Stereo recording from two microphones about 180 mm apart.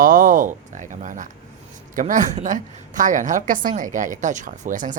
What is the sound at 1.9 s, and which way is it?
Speech, 45° right (ahead or behind).